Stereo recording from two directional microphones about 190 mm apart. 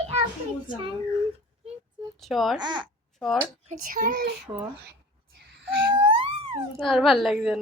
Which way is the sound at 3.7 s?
45° right (ahead or behind).